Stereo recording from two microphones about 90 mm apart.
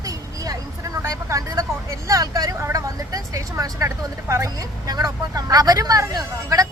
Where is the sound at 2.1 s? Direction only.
40° right (ahead or behind).